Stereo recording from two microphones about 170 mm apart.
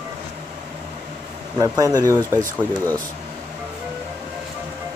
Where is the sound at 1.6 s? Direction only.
20° right (ahead or behind).